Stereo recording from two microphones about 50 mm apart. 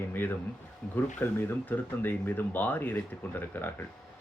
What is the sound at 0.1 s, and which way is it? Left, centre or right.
Speech, left.